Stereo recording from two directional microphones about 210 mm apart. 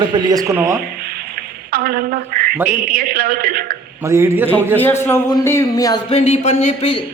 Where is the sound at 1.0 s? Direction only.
45° right (ahead or behind).